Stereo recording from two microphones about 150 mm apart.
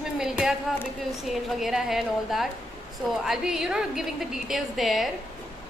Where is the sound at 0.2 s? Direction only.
5° right (ahead or behind).